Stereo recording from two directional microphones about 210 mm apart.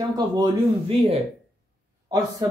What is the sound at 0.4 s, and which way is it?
Speech, 30° right (ahead or behind).